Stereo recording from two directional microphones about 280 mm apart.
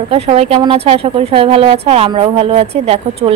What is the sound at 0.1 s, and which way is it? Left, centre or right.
A woman's voice, right.